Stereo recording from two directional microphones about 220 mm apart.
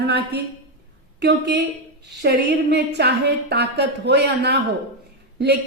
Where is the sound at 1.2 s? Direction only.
50° right (ahead or behind).